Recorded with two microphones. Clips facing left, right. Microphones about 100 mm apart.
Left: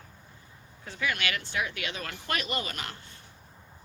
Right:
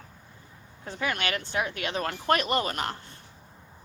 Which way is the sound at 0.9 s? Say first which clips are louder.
Right 2 dB; 40° right (ahead or behind).